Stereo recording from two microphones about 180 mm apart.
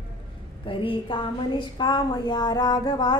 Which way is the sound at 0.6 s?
30° left (ahead or behind).